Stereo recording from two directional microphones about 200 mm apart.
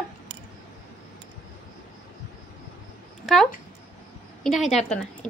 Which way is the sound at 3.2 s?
Centre (ahead or behind).